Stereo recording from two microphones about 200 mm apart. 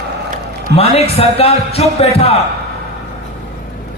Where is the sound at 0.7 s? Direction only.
30° left (ahead or behind).